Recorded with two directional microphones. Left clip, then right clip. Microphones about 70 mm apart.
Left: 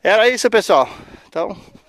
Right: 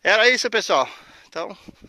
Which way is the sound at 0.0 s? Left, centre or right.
Left.